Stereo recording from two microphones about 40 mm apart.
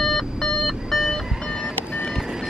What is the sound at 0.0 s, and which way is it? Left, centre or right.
Alarm clock, centre.